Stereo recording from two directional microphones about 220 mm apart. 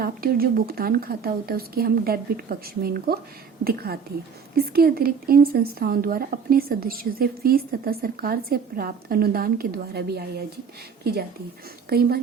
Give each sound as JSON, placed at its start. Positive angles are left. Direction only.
{"t": 0.0, "sound": "a woman's voice", "side_deg": -40}